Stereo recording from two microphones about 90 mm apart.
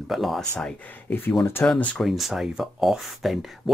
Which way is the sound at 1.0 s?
25° left (ahead or behind).